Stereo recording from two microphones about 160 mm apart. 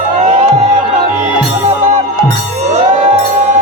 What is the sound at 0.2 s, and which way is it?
Music, 50° right (ahead or behind).